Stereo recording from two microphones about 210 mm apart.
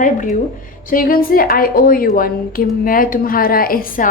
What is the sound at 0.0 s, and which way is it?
A woman's voice, 40° left (ahead or behind).